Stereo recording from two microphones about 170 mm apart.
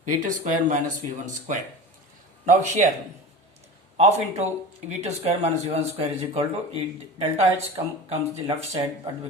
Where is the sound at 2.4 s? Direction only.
45° right (ahead or behind).